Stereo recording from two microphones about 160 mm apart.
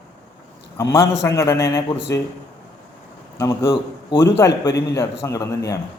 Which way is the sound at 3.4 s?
15° left (ahead or behind).